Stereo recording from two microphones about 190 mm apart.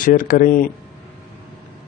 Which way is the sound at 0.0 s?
45° left (ahead or behind).